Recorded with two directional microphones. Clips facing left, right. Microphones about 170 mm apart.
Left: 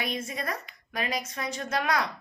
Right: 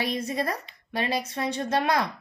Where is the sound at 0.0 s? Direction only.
35° right (ahead or behind).